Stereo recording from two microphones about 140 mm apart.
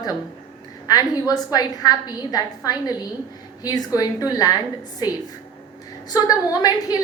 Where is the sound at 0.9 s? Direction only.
25° left (ahead or behind).